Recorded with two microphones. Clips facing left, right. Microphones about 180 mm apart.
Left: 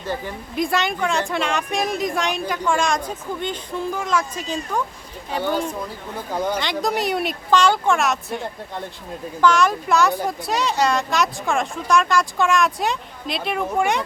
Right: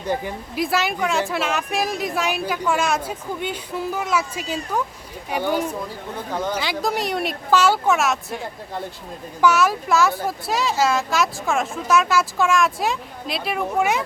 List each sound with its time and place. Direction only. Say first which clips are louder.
0.0 s speech: right 3 dB; 15° right (ahead or behind)
0.5 s a woman's voice: left 1 dB; 5° right (ahead or behind)